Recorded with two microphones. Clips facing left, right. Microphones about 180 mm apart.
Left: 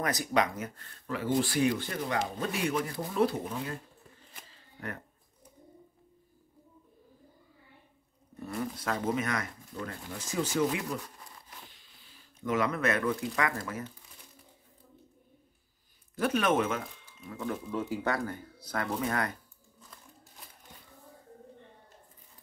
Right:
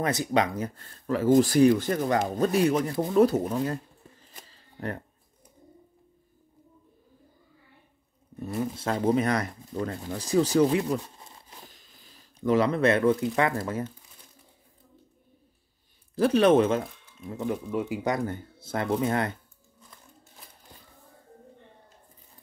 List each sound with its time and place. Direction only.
0.0 s speech: 25° right (ahead or behind)
4.5 s shuffling cards: 35° right (ahead or behind)
8.4 s speech: 20° right (ahead or behind)
11.6 s speech: 40° right (ahead or behind)
16.2 s speech: 30° right (ahead or behind)
17.3 s speech: 20° right (ahead or behind)